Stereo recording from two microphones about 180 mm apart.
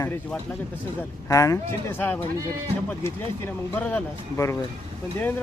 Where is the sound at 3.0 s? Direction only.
10° left (ahead or behind).